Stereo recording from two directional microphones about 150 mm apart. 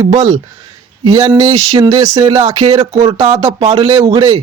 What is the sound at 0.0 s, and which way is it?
Speech, 25° right (ahead or behind).